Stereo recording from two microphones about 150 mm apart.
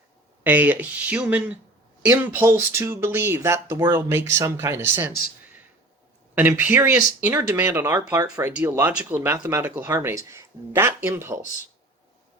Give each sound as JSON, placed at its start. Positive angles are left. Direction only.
{"t": 0.4, "sound": "speech", "side_deg": -10}
{"t": 6.6, "sound": "speech", "side_deg": -15}